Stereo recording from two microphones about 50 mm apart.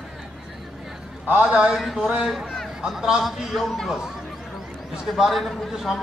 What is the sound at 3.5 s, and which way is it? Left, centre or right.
Speech, centre.